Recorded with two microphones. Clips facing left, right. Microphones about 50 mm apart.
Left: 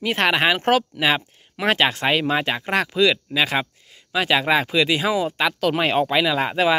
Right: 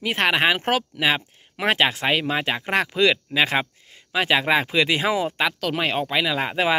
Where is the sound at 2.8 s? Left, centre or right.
Right.